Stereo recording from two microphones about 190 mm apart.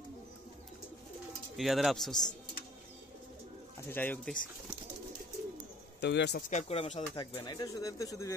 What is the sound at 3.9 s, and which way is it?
Speech, 10° left (ahead or behind).